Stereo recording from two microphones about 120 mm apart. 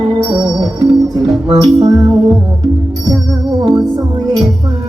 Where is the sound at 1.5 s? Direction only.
30° right (ahead or behind).